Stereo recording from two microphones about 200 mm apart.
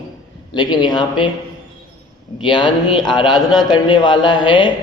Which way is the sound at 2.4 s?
20° left (ahead or behind).